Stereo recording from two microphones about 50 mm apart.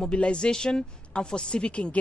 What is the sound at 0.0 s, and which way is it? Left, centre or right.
A woman's voice, centre.